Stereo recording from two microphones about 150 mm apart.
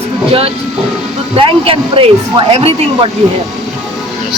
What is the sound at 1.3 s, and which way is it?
A woman's voice, 35° right (ahead or behind).